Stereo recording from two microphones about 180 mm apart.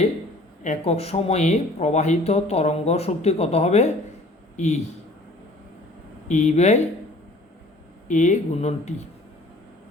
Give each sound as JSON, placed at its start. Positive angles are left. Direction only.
{"t": 0.6, "sound": "a man's voice", "side_deg": 40}
{"t": 6.2, "sound": "speech", "side_deg": 40}
{"t": 8.0, "sound": "speech", "side_deg": 45}